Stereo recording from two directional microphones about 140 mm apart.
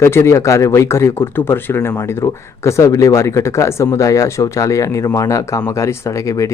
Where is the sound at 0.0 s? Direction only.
20° left (ahead or behind).